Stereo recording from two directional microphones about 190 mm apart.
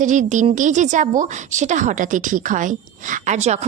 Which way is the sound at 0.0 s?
40° right (ahead or behind).